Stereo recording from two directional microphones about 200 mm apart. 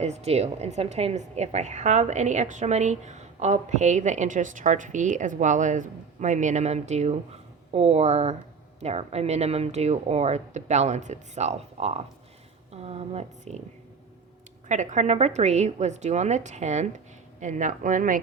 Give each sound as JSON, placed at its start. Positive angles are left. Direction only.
{"t": 0.0, "sound": "a woman's voice", "side_deg": -35}
{"t": 14.7, "sound": "a woman's voice", "side_deg": -35}